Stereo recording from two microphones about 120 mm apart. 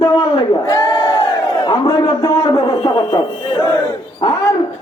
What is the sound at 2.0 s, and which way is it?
A man's voice, 25° left (ahead or behind).